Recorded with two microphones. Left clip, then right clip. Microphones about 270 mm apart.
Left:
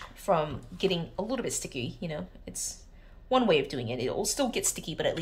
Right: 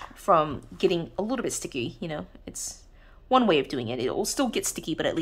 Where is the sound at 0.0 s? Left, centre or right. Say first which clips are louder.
Right 6 dB; centre.